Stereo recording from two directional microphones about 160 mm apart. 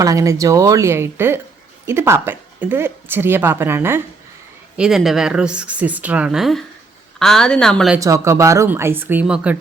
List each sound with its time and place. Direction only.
0.0 s a woman's voice: 20° right (ahead or behind)
4.8 s speech: centre (ahead or behind)
7.9 s a woman's voice: 20° right (ahead or behind)